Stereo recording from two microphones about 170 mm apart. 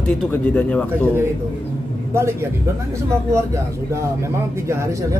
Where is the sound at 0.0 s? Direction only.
10° left (ahead or behind).